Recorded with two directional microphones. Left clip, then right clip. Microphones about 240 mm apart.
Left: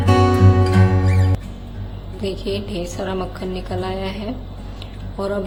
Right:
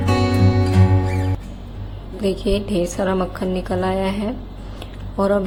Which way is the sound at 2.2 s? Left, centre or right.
Centre.